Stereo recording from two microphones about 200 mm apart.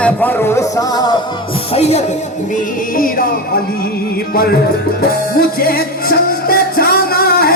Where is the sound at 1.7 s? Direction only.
30° left (ahead or behind).